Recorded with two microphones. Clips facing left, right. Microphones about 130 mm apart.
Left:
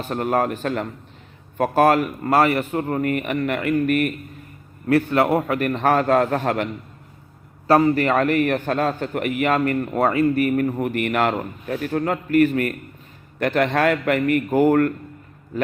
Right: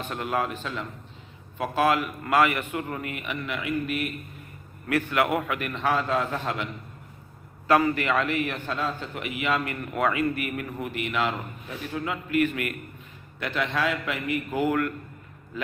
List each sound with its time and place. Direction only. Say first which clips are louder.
0.0 s a man's voice: left 7 dB; 40° left (ahead or behind)
4.9 s a man's voice: left 7 dB; 30° left (ahead or behind); by 6.7 s 50° left (ahead or behind)
7.7 s a man's voice: left 6 dB; 35° left (ahead or behind)
13.4 s a man's voice: left 8 dB; 50° left (ahead or behind)